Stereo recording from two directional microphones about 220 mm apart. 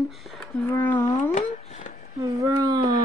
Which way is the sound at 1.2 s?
35° left (ahead or behind).